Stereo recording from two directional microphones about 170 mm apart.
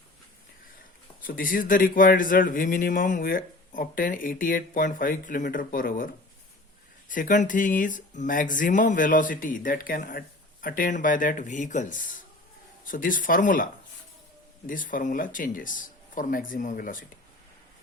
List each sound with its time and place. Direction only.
1.2 s speech: 55° left (ahead or behind)
7.1 s speech: 50° left (ahead or behind)
14.7 s speech: 50° left (ahead or behind)